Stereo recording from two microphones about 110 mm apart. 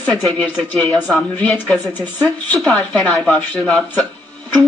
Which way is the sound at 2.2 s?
Centre (ahead or behind).